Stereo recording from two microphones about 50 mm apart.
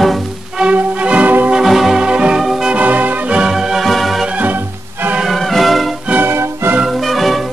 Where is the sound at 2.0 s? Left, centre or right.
Centre.